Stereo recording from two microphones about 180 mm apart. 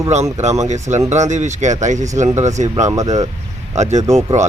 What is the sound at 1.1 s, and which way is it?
Speech, 40° right (ahead or behind).